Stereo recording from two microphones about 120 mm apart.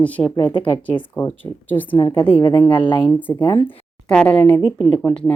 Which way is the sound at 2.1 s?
45° left (ahead or behind).